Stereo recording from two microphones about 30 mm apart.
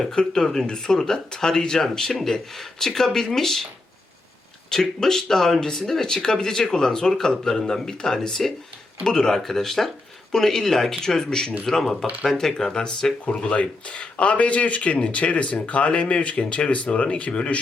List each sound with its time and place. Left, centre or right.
0.3 s speech: centre
4.7 s speech: centre
9.4 s speech: centre
11.6 s speech: centre; by 13.1 s left
13.3 s speech: left